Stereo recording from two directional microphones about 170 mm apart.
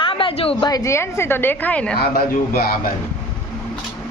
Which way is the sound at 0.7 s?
20° left (ahead or behind).